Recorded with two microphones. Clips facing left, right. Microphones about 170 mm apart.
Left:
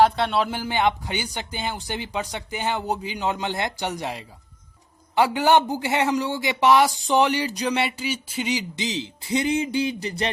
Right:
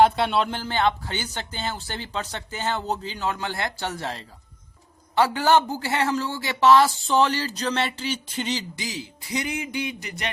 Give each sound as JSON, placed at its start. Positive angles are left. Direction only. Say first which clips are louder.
{"t": 0.0, "sound": "speech", "louder": "even", "side_deg": 0}
{"t": 8.7, "sound": "speech", "louder": "left 5 dB", "side_deg": 20}